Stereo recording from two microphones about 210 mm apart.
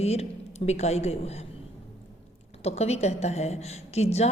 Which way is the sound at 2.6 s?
30° left (ahead or behind).